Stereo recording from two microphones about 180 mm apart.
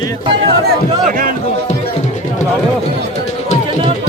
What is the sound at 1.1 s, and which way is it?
Music, 50° right (ahead or behind).